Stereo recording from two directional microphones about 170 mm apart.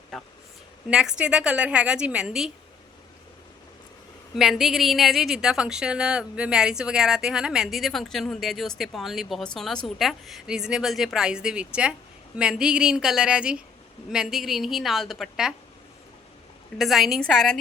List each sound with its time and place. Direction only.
0.1 s a woman's voice: 5° left (ahead or behind)
4.4 s a woman's voice: centre (ahead or behind)
16.7 s a woman's voice: centre (ahead or behind)